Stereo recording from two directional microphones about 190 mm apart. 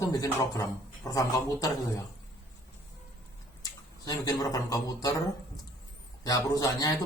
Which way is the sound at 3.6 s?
20° left (ahead or behind).